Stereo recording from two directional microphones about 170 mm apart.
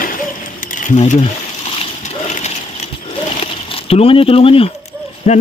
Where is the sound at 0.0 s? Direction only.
55° left (ahead or behind); by 4.7 s 35° left (ahead or behind).